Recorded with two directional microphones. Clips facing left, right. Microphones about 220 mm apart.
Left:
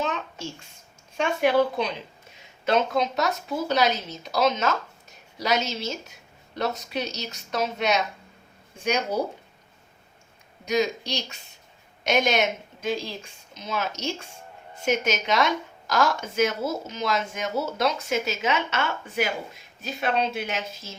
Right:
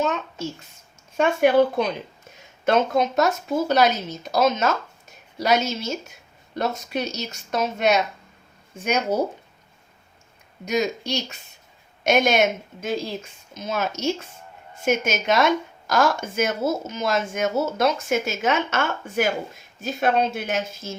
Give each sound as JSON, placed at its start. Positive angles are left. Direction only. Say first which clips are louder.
{"t": 1.1, "sound": "speech", "louder": "right 4 dB", "side_deg": -50}
{"t": 10.7, "sound": "speech", "louder": "right 1 dB", "side_deg": -50}